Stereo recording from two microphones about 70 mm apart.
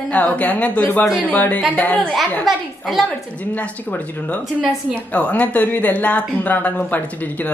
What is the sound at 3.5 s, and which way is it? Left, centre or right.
Speech, left.